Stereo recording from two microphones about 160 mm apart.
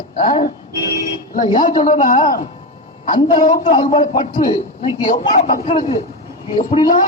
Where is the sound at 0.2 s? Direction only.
60° left (ahead or behind).